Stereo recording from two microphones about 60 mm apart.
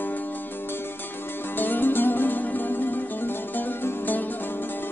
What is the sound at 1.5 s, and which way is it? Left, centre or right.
Music, left.